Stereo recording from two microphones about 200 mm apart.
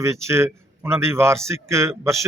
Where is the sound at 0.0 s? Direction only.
15° right (ahead or behind).